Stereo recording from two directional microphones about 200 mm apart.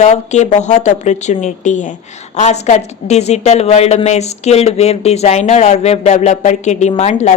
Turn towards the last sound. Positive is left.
turn(degrees=35)  # may be behind; listen again after turning